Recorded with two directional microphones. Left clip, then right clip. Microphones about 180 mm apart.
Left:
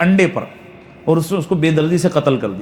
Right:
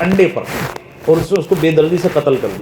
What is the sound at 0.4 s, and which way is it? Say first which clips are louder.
Speech: right 2 dB; 50° left (ahead or behind).